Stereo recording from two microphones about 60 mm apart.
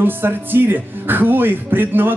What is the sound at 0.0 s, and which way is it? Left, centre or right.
Speech, right.